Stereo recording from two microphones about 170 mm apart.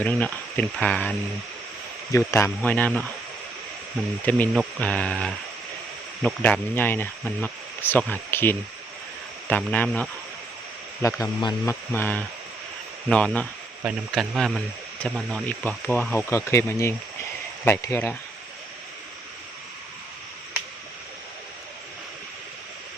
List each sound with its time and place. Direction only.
0.0 s speech: 10° left (ahead or behind)
2.1 s speech: 15° left (ahead or behind)
4.3 s speech: 10° left (ahead or behind)
11.0 s speech: 20° left (ahead or behind)